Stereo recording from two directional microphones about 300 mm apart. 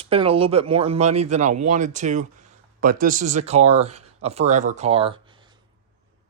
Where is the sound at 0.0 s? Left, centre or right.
Centre.